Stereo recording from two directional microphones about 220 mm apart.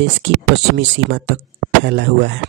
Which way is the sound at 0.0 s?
55° right (ahead or behind).